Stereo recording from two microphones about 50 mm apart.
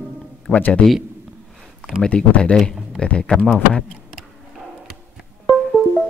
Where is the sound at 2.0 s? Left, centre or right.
Left.